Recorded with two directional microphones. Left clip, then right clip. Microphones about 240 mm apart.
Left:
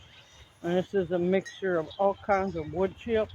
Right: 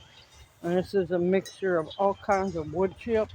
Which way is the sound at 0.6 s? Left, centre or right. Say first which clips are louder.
Right 1 dB; centre.